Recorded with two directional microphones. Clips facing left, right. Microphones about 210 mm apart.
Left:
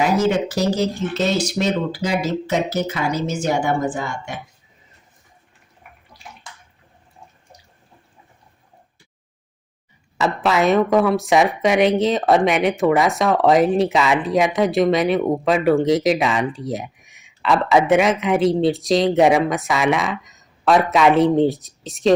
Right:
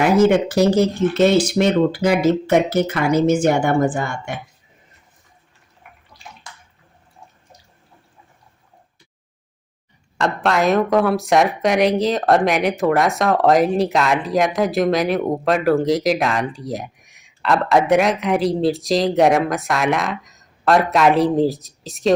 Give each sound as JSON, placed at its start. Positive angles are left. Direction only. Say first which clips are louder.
{"t": 0.0, "sound": "speech", "louder": "right 4 dB", "side_deg": -55}
{"t": 6.1, "sound": "bathtub", "louder": "even", "side_deg": 10}
{"t": 10.2, "sound": "speech", "louder": "even", "side_deg": 0}